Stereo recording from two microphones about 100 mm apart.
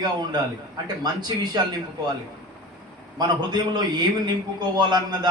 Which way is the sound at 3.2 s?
45° right (ahead or behind).